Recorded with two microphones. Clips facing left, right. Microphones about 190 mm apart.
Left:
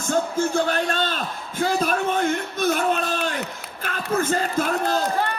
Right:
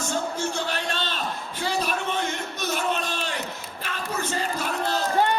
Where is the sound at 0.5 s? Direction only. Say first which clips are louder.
Left 7 dB; 45° left (ahead or behind).